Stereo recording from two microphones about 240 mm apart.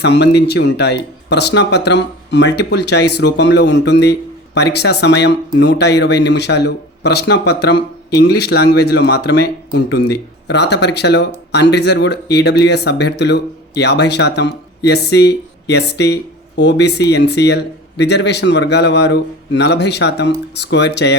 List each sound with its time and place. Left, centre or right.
0.0 s speech: left